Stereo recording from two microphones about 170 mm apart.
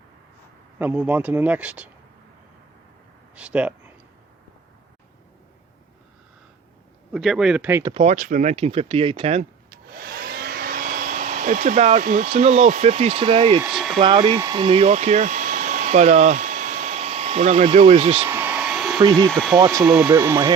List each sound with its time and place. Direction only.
0.8 s speech: 10° right (ahead or behind)
3.3 s speech: 5° right (ahead or behind)
7.1 s a man's voice: centre (ahead or behind)
7.9 s speech: 40° right (ahead or behind)
9.6 s hair dryer: 60° right (ahead or behind)
12.3 s speech: 40° right (ahead or behind)
13.6 s a man's voice: 5° right (ahead or behind)
14.0 s speech: 30° right (ahead or behind)
14.6 s speech: 35° right (ahead or behind)
18.3 s hair dryer: 10° right (ahead or behind)
19.1 s a man's voice: 5° left (ahead or behind)
19.5 s speech: 20° right (ahead or behind)
19.8 s speech: 5° right (ahead or behind)